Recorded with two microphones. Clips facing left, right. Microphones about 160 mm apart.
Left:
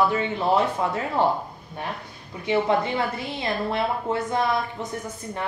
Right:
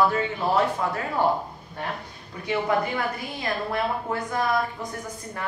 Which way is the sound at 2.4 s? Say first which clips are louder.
Left 3 dB; 25° left (ahead or behind).